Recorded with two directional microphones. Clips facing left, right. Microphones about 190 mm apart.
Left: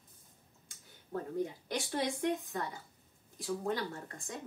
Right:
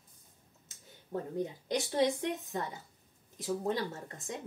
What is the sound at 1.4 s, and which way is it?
A woman's voice, 20° right (ahead or behind).